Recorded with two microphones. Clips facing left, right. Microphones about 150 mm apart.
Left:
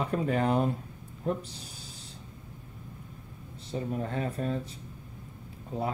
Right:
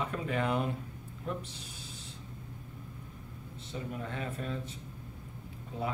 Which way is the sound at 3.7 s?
40° left (ahead or behind).